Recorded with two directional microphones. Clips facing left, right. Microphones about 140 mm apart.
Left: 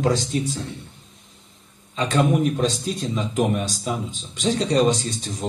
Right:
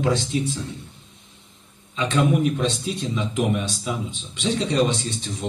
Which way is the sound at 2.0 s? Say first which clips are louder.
Left 1 dB; 40° left (ahead or behind).